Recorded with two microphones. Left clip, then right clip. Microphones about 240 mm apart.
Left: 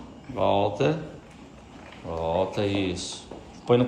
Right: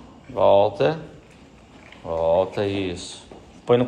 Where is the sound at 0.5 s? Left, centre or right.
Centre.